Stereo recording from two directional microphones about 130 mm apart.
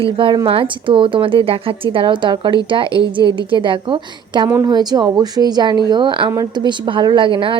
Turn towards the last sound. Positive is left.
turn(degrees=-40)  # may be behind; listen again after turning